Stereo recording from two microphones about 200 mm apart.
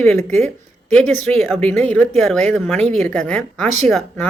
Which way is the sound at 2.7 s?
35° right (ahead or behind).